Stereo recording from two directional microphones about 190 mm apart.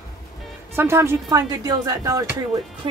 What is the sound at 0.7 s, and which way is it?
A woman's voice, 15° right (ahead or behind).